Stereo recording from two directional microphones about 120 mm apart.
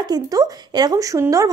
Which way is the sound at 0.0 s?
30° right (ahead or behind).